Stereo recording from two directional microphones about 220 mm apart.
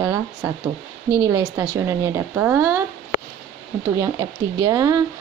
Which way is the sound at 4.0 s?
15° right (ahead or behind).